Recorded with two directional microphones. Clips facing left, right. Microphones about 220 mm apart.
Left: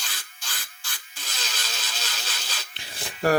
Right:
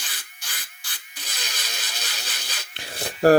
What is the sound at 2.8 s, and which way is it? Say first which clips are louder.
Rub: right 8 dB; 65° right (ahead or behind).